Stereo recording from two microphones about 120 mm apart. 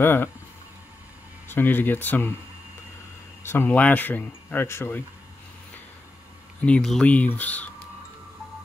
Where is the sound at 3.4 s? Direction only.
20° left (ahead or behind).